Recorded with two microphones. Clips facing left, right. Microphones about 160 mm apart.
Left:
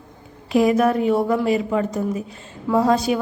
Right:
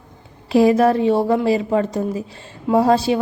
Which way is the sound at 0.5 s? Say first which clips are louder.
Right 3 dB; 35° right (ahead or behind).